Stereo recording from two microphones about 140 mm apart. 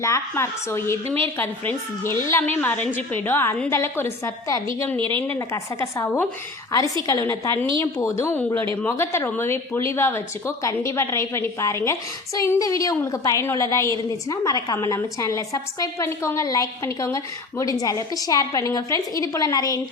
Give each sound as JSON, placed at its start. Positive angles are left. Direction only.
{"t": 0.0, "sound": "a woman's voice", "side_deg": 20}
{"t": 4.9, "sound": "a woman's voice", "side_deg": -35}
{"t": 5.3, "sound": "a woman's voice", "side_deg": 20}